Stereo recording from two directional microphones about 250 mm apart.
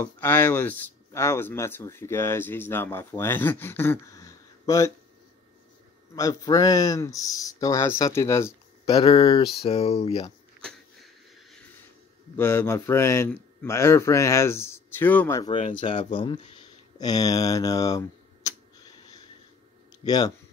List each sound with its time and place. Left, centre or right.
0.0 s speech: centre
6.1 s speech: centre
12.4 s speech: centre
15.5 s speech: left
20.0 s speech: centre